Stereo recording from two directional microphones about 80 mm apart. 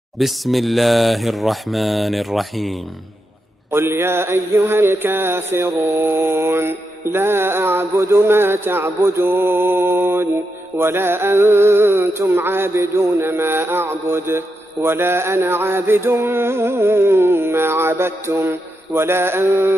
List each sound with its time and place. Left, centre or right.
0.2 s mantra: centre
3.7 s mantra: right